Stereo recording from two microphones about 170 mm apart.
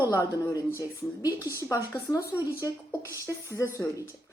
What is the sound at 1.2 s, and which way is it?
Speech, 15° right (ahead or behind).